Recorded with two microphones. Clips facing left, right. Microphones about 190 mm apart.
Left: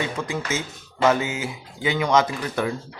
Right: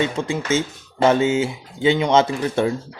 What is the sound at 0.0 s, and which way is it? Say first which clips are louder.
Speech: right 5 dB; 25° right (ahead or behind).